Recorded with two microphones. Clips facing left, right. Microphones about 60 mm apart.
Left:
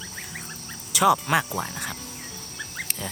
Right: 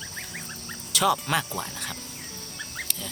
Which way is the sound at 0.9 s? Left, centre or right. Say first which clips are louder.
Left 4 dB; centre.